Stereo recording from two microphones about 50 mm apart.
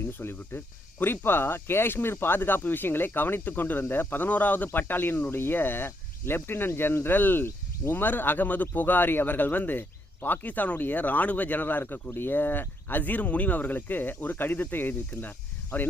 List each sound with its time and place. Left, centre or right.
0.0 s speech: left